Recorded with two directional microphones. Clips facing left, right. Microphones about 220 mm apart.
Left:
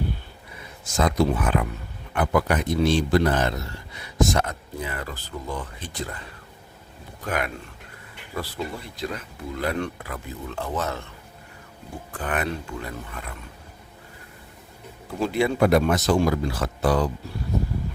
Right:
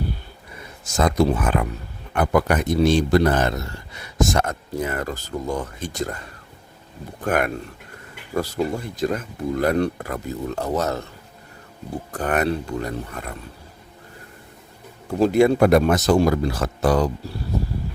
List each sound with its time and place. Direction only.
0.9 s speech: 45° right (ahead or behind)
12.1 s speech: 40° right (ahead or behind)
15.2 s speech: 45° right (ahead or behind)